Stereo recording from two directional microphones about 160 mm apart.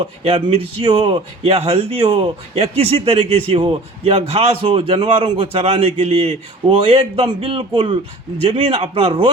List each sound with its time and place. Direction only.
0.0 s speech: 35° right (ahead or behind)